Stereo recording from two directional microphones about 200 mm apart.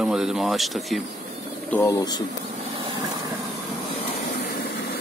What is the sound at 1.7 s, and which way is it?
Speech, 15° left (ahead or behind).